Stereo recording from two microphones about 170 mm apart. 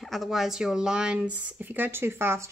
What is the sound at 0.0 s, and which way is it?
Speech, centre (ahead or behind).